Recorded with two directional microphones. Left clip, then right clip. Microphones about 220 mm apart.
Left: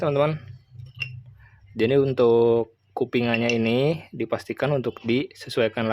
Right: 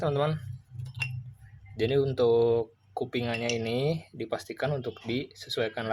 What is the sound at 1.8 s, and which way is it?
Speech, 35° left (ahead or behind).